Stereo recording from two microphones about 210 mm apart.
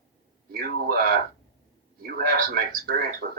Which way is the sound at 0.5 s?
45° right (ahead or behind).